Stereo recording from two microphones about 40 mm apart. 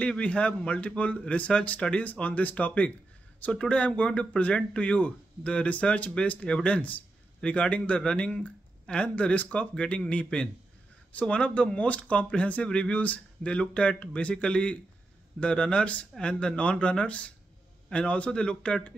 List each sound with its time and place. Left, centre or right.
0.2 s speech: left
12.6 s speech: left
12.9 s speech: left